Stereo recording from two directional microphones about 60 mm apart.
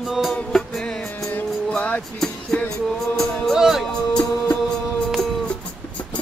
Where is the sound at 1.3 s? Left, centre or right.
Left.